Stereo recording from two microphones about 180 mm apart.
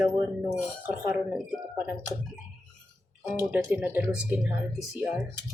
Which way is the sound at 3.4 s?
15° right (ahead or behind).